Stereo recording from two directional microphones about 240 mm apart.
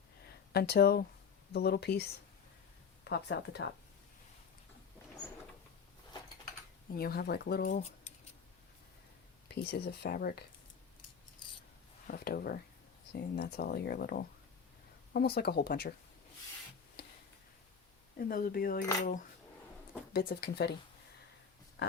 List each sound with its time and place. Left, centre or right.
0.5 s speech: left
6.9 s speech: left
9.5 s speech: left
12.0 s speech: left
18.2 s speech: left